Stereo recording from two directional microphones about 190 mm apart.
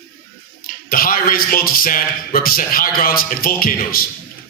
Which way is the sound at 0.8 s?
50° left (ahead or behind).